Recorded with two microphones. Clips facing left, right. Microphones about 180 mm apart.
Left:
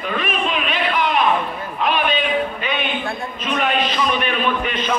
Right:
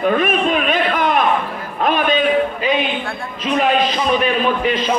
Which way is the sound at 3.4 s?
35° right (ahead or behind).